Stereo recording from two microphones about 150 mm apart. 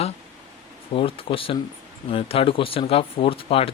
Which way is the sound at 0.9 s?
35° left (ahead or behind).